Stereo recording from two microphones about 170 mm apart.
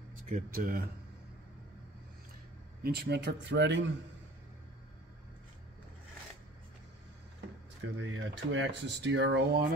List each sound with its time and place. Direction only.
0.3 s speech: 55° right (ahead or behind)
2.8 s speech: 75° right (ahead or behind); by 3.9 s 90° right
8.0 s speech: 90° right